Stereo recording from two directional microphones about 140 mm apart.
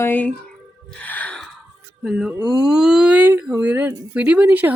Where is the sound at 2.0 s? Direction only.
5° right (ahead or behind).